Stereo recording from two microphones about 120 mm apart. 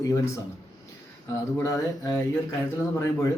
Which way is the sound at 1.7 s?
30° left (ahead or behind).